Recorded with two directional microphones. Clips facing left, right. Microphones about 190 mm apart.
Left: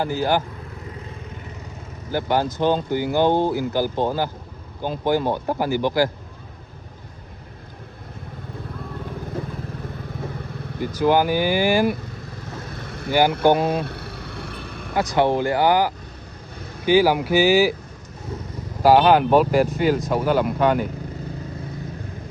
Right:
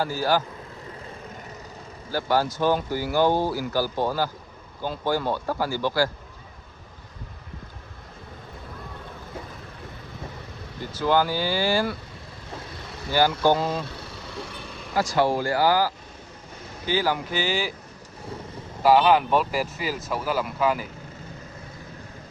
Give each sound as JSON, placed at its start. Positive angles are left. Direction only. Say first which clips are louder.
{"t": 0.0, "sound": "speech", "louder": "left 2 dB", "side_deg": 20}
{"t": 2.0, "sound": "speech", "louder": "left 2 dB", "side_deg": 20}
{"t": 10.8, "sound": "speech", "louder": "left 4 dB", "side_deg": 15}
{"t": 13.3, "sound": "speech", "louder": "left 4 dB", "side_deg": 60}
{"t": 13.7, "sound": "a sound", "louder": "left 5 dB", "side_deg": 60}
{"t": 14.9, "sound": "speech", "louder": "left 3 dB", "side_deg": 20}
{"t": 18.8, "sound": "speech", "louder": "left 3 dB", "side_deg": 0}